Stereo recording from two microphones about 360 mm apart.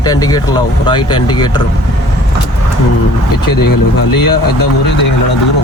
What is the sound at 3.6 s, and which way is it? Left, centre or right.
Speech, left.